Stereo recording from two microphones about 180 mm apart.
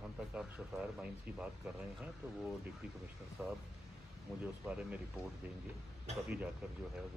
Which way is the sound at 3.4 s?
5° right (ahead or behind).